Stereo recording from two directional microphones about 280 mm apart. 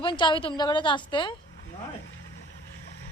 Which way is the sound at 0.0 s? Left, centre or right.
Centre.